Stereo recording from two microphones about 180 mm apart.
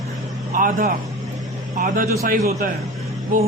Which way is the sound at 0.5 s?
50° right (ahead or behind).